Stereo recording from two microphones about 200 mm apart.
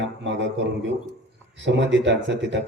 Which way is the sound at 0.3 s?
65° right (ahead or behind).